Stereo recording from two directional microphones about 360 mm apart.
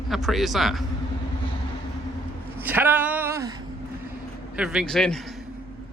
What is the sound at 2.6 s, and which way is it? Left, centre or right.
Speech, centre.